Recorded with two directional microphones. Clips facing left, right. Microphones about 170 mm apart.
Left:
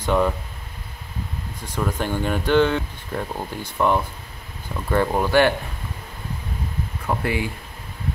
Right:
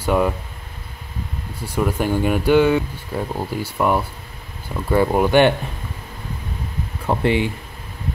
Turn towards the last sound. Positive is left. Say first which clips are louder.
# right 5 dB
turn(degrees=-25)  # may be behind; listen again after turning